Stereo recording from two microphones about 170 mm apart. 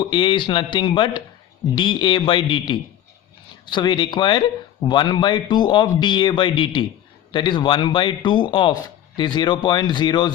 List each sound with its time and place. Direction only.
0.0 s speech: 30° left (ahead or behind)